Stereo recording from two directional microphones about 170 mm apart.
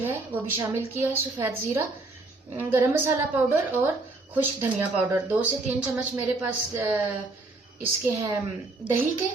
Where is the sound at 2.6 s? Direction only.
15° right (ahead or behind).